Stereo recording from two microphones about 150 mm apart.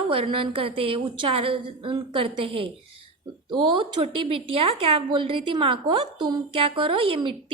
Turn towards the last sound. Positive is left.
turn(degrees=-35)  # may be behind; listen again after turning